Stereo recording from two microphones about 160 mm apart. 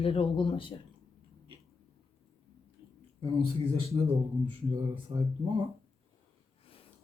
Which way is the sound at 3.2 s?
35° right (ahead or behind).